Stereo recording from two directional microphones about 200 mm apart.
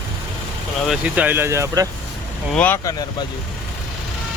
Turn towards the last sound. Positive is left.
turn(degrees=20)  # may be behind; listen again after turning